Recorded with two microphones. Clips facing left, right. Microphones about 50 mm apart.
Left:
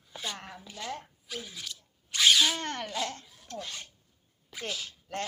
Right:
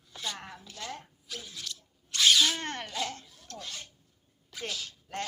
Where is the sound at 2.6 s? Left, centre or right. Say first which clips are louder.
Left 1 dB; right.